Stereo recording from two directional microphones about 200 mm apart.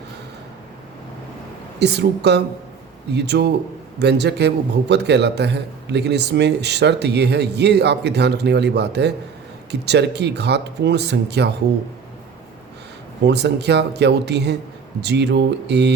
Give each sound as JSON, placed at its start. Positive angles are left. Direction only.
{"t": 1.8, "sound": "a man's voice", "side_deg": -55}
{"t": 13.2, "sound": "a man's voice", "side_deg": -55}